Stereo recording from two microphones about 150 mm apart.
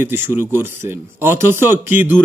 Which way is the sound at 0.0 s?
15° right (ahead or behind).